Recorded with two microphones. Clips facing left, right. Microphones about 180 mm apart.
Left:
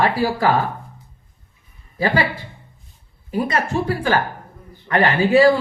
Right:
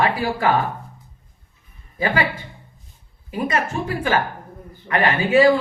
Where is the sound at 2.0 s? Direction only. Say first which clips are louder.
Left 2 dB; 35° left (ahead or behind).